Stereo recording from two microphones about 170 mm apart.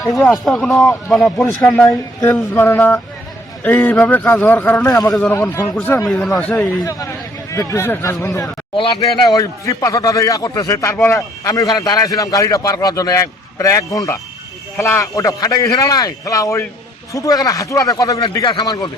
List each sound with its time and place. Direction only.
0.0 s a man's voice: centre (ahead or behind)
4.9 s a man's voice: 20° left (ahead or behind)
5.1 s a man's voice: 10° left (ahead or behind)
8.7 s a man's voice: 30° left (ahead or behind)